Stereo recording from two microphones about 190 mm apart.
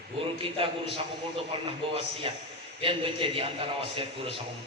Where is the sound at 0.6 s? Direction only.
30° right (ahead or behind).